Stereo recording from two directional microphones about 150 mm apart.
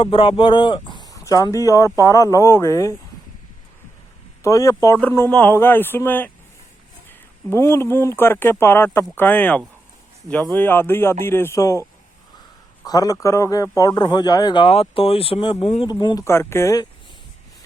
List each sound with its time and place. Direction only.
0.0 s speech: 35° left (ahead or behind); by 2.9 s 20° left (ahead or behind)
4.4 s speech: 20° left (ahead or behind); by 15.9 s 40° left (ahead or behind)
15.9 s speech: 30° left (ahead or behind)
16.2 s speech: 15° left (ahead or behind)